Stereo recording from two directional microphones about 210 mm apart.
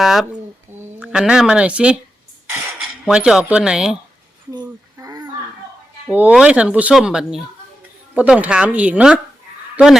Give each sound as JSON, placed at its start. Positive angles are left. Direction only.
{"t": 0.0, "sound": "speech", "side_deg": 0}
{"t": 2.5, "sound": "cutlery", "side_deg": -10}
{"t": 4.5, "sound": "a sound", "side_deg": -15}
{"t": 6.1, "sound": "speech", "side_deg": -5}